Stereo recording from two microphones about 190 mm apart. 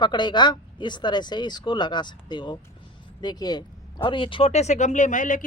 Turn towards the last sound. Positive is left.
turn(degrees=45)  # may be behind; listen again after turning